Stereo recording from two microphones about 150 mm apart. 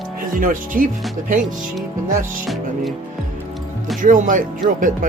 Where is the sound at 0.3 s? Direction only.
65° right (ahead or behind).